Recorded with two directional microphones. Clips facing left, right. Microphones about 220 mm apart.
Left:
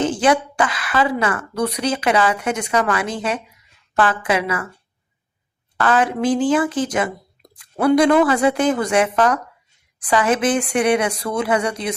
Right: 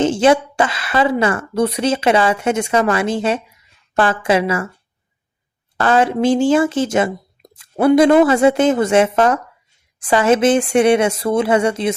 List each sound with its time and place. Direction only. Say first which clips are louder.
0.0 s a woman's voice: right 4 dB; 25° right (ahead or behind)
5.8 s a woman's voice: right 3 dB; 25° right (ahead or behind)